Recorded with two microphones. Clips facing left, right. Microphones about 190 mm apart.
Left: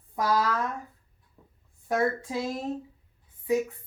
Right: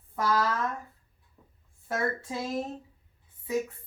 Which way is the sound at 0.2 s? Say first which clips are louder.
Left 1 dB; 10° left (ahead or behind).